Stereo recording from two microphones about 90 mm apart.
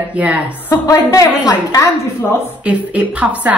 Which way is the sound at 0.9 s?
40° left (ahead or behind).